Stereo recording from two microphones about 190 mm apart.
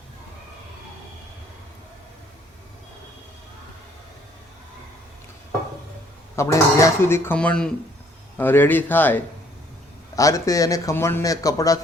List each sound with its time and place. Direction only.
6.3 s speech: 15° left (ahead or behind)